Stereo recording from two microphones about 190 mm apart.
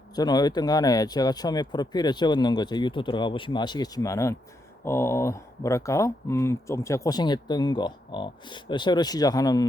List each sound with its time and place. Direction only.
0.2 s speech: 20° left (ahead or behind)